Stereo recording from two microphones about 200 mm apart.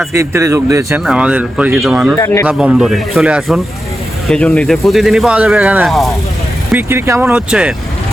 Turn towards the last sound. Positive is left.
turn(degrees=-5)  # may be behind; listen again after turning